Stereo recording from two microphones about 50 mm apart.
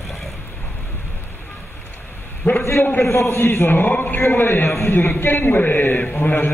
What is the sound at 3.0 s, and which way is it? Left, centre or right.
A man's voice, left.